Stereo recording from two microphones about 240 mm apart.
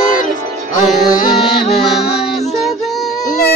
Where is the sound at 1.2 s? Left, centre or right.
Centre.